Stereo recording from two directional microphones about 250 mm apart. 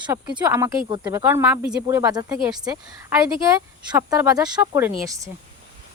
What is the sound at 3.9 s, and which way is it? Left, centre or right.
A woman's voice, centre.